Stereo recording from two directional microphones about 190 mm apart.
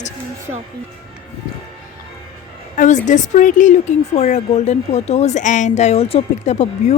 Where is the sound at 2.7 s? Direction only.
40° left (ahead or behind).